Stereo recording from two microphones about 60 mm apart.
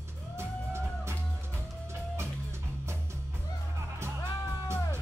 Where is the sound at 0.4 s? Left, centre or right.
Right.